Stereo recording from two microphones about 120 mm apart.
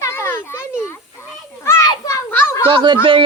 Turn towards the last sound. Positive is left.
turn(degrees=-45)  # may be behind; listen again after turning